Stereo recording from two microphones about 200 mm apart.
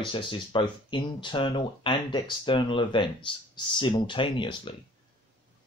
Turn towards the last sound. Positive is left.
turn(degrees=25)  # may be behind; listen again after turning